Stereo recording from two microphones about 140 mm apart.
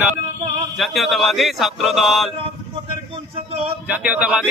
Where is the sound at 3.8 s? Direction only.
10° right (ahead or behind).